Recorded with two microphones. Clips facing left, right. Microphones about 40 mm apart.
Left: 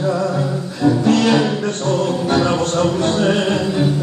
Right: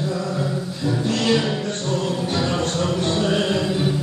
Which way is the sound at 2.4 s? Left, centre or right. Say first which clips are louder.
Left 6 dB; left.